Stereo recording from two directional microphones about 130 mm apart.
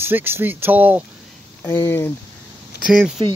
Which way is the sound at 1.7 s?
20° left (ahead or behind).